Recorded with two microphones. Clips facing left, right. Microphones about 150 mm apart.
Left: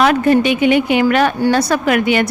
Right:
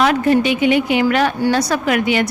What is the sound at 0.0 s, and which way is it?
A woman's voice, 60° left (ahead or behind).